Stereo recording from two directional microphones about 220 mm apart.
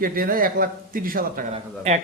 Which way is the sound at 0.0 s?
40° right (ahead or behind).